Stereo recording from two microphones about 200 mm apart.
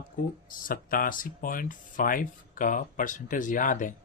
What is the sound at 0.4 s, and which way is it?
A man's voice, 45° left (ahead or behind).